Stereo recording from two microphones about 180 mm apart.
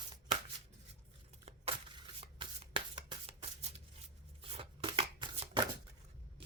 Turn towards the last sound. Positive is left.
turn(degrees=-25)  # may be behind; listen again after turning